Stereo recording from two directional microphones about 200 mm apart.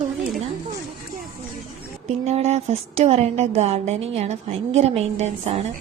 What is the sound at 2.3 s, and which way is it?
A woman's voice, 30° right (ahead or behind).